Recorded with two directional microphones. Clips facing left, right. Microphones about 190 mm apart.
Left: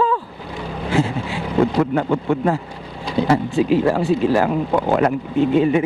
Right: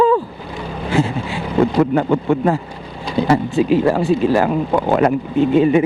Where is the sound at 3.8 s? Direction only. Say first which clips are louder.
Right 2 dB; 20° right (ahead or behind).